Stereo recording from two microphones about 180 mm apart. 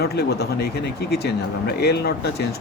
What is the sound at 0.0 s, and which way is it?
Speech, 60° left (ahead or behind).